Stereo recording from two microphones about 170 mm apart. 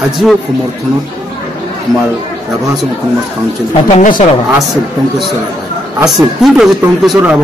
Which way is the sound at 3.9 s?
45° left (ahead or behind).